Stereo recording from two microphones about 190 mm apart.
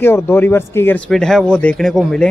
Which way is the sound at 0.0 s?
10° left (ahead or behind).